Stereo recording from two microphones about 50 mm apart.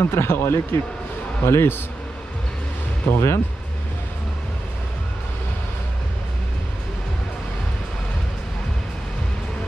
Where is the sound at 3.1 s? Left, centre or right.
Left.